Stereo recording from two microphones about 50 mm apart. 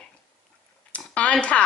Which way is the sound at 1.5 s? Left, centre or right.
Left.